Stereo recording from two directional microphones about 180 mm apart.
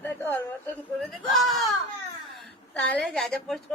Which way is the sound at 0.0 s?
10° left (ahead or behind).